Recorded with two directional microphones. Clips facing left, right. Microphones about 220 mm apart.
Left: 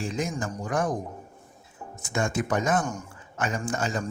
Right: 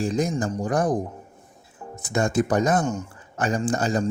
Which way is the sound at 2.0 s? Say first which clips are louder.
Right 5 dB; 35° right (ahead or behind).